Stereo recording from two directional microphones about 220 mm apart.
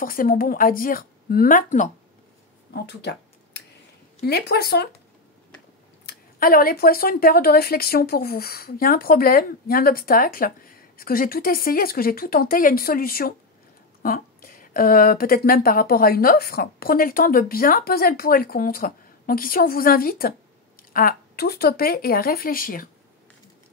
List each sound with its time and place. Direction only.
0.0 s a woman's voice: 40° left (ahead or behind)
2.7 s a sound: 50° left (ahead or behind)
4.2 s speech: 45° left (ahead or behind)
6.0 s a woman's voice: 45° left (ahead or behind)